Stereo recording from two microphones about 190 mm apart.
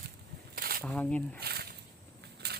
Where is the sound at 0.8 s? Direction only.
5° left (ahead or behind).